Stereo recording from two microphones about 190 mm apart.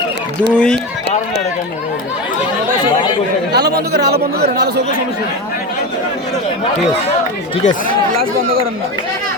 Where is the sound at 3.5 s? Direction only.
60° right (ahead or behind).